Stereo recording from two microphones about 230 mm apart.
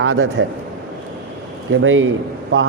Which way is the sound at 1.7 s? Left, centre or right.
Right.